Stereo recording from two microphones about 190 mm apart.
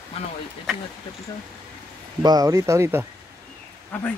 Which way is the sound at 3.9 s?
5° left (ahead or behind).